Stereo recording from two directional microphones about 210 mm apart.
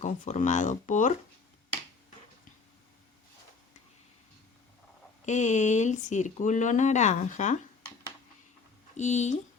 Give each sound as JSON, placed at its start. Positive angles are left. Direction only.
{"t": 0.0, "sound": "speech", "side_deg": 35}
{"t": 5.2, "sound": "speech", "side_deg": 35}
{"t": 9.0, "sound": "speech", "side_deg": 35}